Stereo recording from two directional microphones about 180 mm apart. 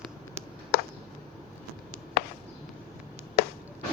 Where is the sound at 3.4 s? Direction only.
60° left (ahead or behind).